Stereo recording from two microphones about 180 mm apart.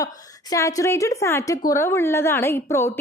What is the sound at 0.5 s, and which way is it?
A woman's voice, 15° left (ahead or behind).